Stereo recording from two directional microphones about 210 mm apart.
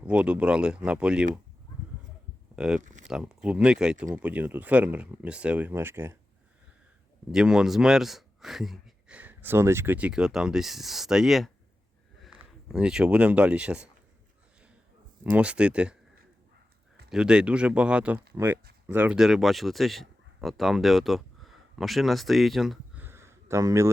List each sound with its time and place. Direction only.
0.0 s speech: 5° right (ahead or behind)
2.6 s speech: 5° right (ahead or behind)
2.8 s a sound: 35° right (ahead or behind)
3.1 s speech: 5° right (ahead or behind)
7.3 s speech: 5° right (ahead or behind)
15.2 s speech: 5° right (ahead or behind)
17.1 s speech: 5° right (ahead or behind)